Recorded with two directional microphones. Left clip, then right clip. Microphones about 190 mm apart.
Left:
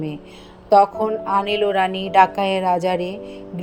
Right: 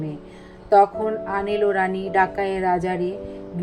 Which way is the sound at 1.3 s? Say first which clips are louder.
Left 3 dB; 35° left (ahead or behind).